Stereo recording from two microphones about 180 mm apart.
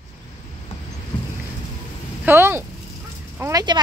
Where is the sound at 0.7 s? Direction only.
30° left (ahead or behind).